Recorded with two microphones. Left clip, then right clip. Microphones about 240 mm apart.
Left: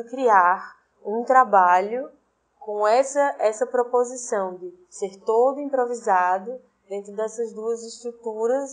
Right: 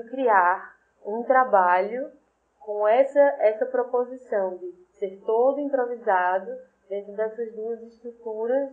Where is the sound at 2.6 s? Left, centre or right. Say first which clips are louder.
Left 1 dB; left.